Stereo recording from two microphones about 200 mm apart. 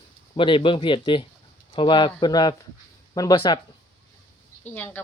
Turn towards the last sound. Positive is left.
turn(degrees=10)  # may be behind; listen again after turning